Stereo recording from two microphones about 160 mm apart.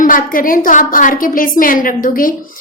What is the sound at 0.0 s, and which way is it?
A woman's voice, 60° left (ahead or behind).